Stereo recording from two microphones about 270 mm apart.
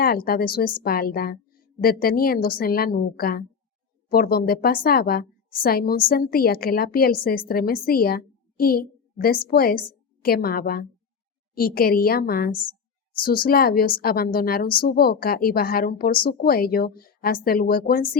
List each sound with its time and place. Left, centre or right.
0.0 s a woman's voice: left